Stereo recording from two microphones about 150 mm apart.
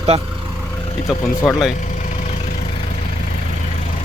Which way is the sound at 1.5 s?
Centre (ahead or behind).